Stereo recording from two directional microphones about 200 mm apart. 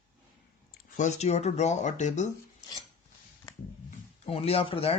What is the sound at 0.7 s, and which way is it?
Speech, 40° left (ahead or behind).